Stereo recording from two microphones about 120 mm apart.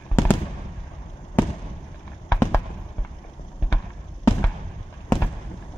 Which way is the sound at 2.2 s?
20° left (ahead or behind).